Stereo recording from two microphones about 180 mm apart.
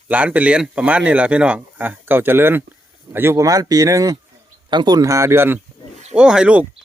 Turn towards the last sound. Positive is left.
turn(degrees=-5)  # may be behind; listen again after turning